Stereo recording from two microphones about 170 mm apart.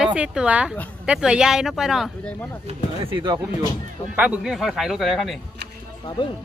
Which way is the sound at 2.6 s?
30° right (ahead or behind).